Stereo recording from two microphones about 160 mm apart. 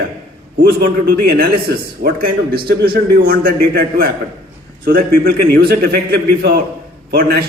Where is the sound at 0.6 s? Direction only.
75° right (ahead or behind).